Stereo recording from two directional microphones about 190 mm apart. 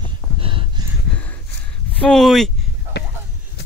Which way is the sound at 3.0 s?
60° left (ahead or behind).